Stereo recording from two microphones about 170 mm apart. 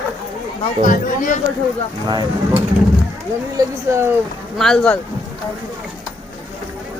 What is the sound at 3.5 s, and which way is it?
Speech, 15° right (ahead or behind).